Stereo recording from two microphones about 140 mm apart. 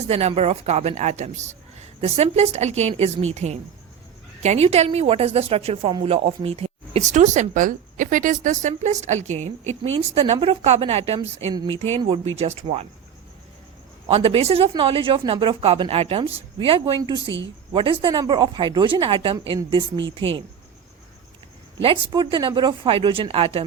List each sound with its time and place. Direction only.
0.1 s speech: 50° right (ahead or behind)
11.5 s a woman's voice: 35° right (ahead or behind)
11.8 s speech: 45° right (ahead or behind)
14.1 s a woman's voice: 40° right (ahead or behind)
21.8 s a woman's voice: 40° right (ahead or behind)